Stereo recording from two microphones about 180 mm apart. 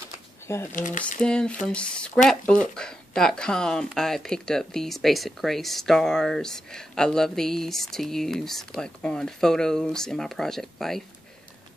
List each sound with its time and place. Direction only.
0.7 s speech: 45° left (ahead or behind)
1.2 s speech: 5° left (ahead or behind)